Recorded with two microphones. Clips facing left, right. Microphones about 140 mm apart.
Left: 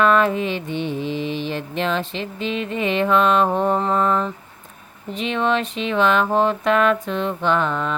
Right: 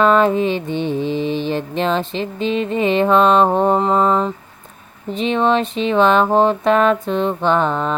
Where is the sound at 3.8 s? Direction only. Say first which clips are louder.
Right 4 dB; 25° right (ahead or behind).